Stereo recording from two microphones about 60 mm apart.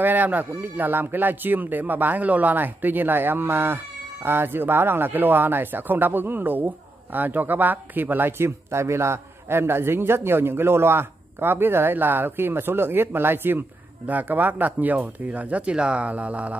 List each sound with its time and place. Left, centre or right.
0.0 s speech: right